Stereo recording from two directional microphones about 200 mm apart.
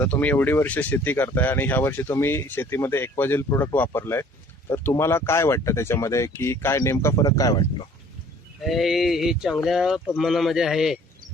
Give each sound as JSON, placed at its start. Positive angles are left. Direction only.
{"t": 0.0, "sound": "speech", "side_deg": 5}
{"t": 8.6, "sound": "speech", "side_deg": 0}